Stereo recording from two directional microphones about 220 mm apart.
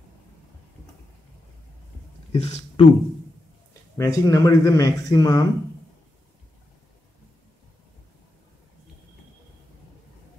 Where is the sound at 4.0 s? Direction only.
15° left (ahead or behind).